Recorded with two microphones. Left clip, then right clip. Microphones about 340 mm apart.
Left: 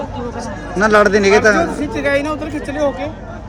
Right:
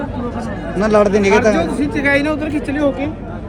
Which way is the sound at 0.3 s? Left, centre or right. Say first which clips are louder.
Left 3 dB; left.